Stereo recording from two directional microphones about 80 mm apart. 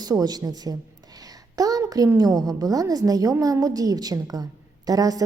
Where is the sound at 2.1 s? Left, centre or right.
Right.